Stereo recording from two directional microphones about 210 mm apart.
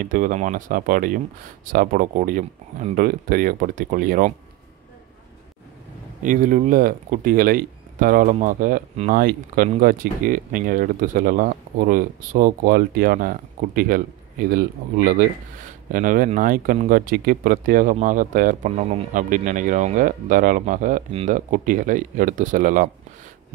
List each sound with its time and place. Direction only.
0.0 s speech: 40° right (ahead or behind)
6.2 s speech: 40° right (ahead or behind)